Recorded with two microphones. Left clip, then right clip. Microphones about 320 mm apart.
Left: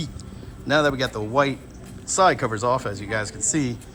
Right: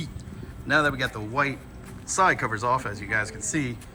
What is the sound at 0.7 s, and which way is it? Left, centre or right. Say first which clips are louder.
Speech: left 2 dB; centre.